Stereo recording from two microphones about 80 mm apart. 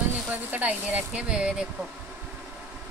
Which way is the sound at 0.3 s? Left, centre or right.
Right.